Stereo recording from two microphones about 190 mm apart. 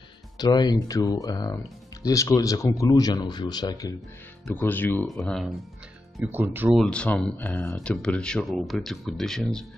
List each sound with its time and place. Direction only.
0.4 s speech: 20° left (ahead or behind)
4.5 s speech: 10° left (ahead or behind)
6.1 s speech: 10° right (ahead or behind)
6.8 s speech: 5° left (ahead or behind)